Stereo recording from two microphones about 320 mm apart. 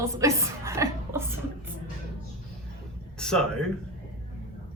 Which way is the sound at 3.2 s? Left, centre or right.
Centre.